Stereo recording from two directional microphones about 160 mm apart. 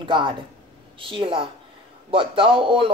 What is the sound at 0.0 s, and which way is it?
Speech, 30° right (ahead or behind).